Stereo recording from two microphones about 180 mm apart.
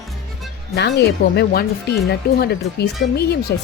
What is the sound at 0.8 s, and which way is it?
Speech, 70° left (ahead or behind).